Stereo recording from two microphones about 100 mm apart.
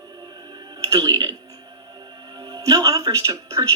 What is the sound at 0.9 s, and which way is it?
Speech, 40° right (ahead or behind).